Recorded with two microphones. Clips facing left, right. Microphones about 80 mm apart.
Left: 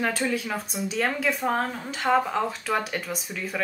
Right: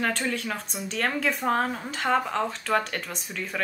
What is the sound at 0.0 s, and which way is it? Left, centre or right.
Speech, centre.